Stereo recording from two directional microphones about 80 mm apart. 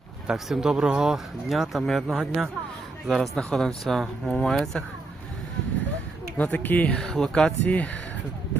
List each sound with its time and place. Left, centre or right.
0.3 s speech: centre
6.3 s speech: centre